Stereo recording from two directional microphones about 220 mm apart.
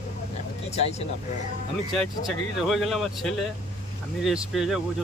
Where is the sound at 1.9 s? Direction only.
Centre (ahead or behind).